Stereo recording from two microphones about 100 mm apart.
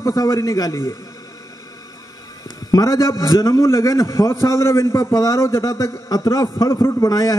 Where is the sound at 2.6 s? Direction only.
35° left (ahead or behind).